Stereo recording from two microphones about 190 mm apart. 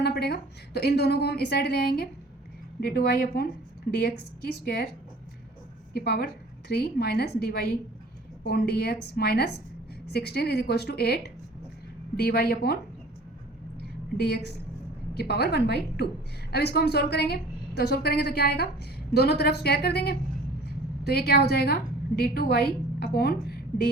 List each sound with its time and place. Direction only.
0.0 s a woman's voice: 60° left (ahead or behind)
5.9 s a woman's voice: 55° left (ahead or behind)
15.2 s a woman's voice: 55° left (ahead or behind)